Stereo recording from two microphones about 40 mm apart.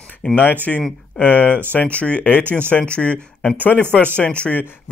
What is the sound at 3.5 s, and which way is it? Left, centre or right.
Speech, left.